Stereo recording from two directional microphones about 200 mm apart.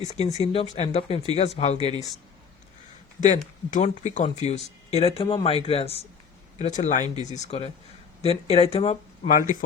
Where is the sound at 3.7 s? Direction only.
35° left (ahead or behind).